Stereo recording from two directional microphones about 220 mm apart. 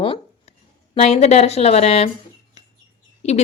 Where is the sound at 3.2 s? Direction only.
30° left (ahead or behind).